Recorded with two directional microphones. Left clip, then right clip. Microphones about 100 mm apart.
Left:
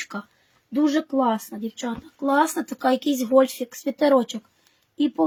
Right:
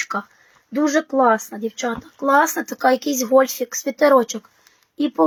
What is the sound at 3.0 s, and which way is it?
Speech, 45° left (ahead or behind).